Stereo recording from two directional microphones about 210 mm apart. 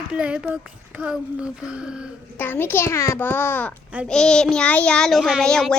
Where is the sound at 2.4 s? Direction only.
10° left (ahead or behind).